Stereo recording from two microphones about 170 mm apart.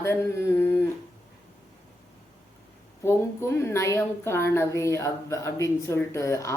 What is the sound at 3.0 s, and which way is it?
A woman's voice, 15° left (ahead or behind).